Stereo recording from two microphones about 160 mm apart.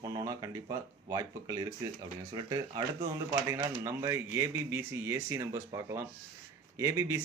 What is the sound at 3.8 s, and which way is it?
Speech, 20° right (ahead or behind).